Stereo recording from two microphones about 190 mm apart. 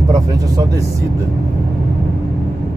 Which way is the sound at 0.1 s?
20° right (ahead or behind).